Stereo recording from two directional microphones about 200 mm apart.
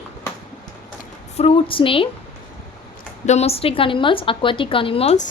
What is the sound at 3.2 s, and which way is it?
A woman's voice, 35° left (ahead or behind).